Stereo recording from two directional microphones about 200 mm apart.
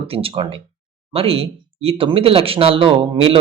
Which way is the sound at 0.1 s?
30° right (ahead or behind).